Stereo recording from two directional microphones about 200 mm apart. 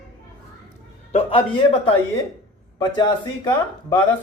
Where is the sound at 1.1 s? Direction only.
25° left (ahead or behind).